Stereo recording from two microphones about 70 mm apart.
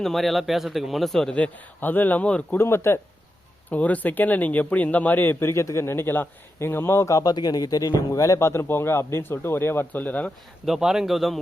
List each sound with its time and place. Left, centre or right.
0.0 s speech: centre
1.3 s a man's voice: left
2.5 s speech: left
3.7 s speech: left
7.3 s speech: left
10.7 s speech: centre